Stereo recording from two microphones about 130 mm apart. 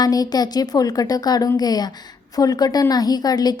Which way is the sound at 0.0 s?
30° left (ahead or behind).